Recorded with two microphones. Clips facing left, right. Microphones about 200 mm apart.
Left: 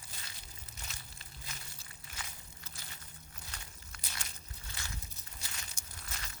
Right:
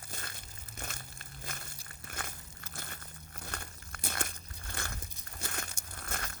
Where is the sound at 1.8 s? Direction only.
55° right (ahead or behind).